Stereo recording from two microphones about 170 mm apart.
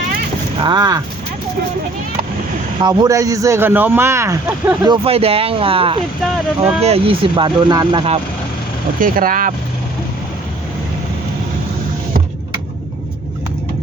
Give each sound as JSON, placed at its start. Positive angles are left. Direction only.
{"t": 0.6, "sound": "speech", "side_deg": -25}
{"t": 2.8, "sound": "a man's voice", "side_deg": -25}
{"t": 4.9, "sound": "speech", "side_deg": -35}
{"t": 9.0, "sound": "speech", "side_deg": -55}